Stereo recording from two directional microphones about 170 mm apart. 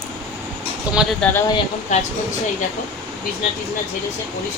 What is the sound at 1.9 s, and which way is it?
Speech, 45° left (ahead or behind).